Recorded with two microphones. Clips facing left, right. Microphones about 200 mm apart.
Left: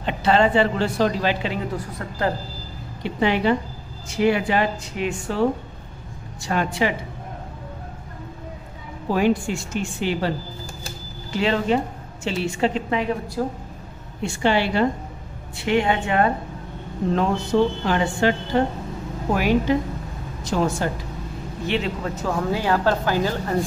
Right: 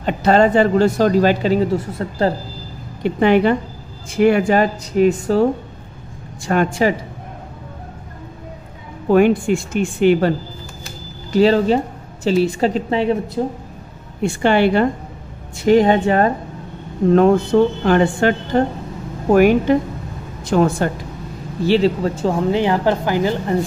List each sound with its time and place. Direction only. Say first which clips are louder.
0.0 s speech: right 5 dB; 45° right (ahead or behind)
3.0 s speech: right 7 dB; 50° right (ahead or behind)
6.4 s speech: right 6 dB; 55° right (ahead or behind)
9.1 s a woman's voice: right 7 dB; 55° right (ahead or behind)
11.3 s speech: right 7 dB; 35° right (ahead or behind)
14.2 s speech: right 6 dB; 55° right (ahead or behind)
15.5 s speech: right 8 dB; 40° right (ahead or behind)
17.1 s a woman's voice: right 9 dB; 55° right (ahead or behind)
21.6 s speech: right 10 dB; 35° right (ahead or behind); by 23.3 s 15° right (ahead or behind)